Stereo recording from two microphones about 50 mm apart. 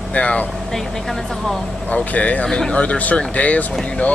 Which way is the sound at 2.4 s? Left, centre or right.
Centre.